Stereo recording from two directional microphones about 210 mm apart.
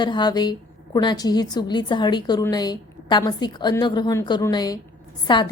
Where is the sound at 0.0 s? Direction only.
20° left (ahead or behind).